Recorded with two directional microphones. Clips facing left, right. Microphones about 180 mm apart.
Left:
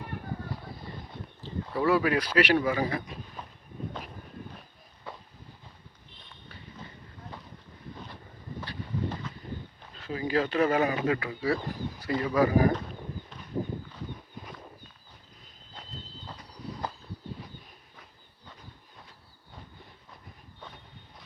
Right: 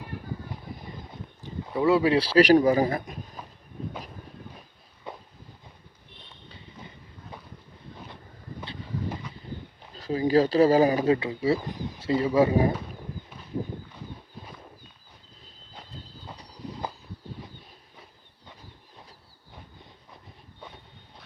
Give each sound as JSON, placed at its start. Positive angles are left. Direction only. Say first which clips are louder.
{"t": 1.6, "sound": "speech", "louder": "right 4 dB", "side_deg": -20}
{"t": 5.1, "sound": "walk", "louder": "right 3 dB", "side_deg": -20}
{"t": 8.6, "sound": "vehicle", "louder": "even", "side_deg": -15}
{"t": 9.9, "sound": "speech", "louder": "right 7 dB", "side_deg": -35}